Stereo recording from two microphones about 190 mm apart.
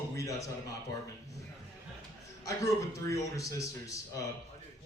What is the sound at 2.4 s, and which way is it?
A man's voice, 15° left (ahead or behind).